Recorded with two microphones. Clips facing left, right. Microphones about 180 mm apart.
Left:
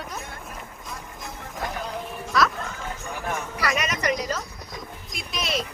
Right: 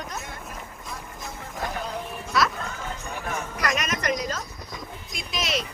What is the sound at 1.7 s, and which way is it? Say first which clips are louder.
Music: even; centre (ahead or behind).